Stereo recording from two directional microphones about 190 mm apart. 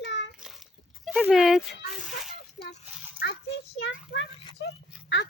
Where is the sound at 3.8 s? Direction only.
70° left (ahead or behind).